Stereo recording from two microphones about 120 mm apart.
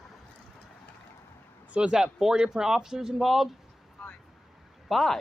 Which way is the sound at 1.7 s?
10° right (ahead or behind).